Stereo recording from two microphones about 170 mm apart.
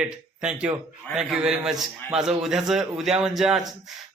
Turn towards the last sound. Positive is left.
turn(degrees=0)  # may be behind; listen again after turning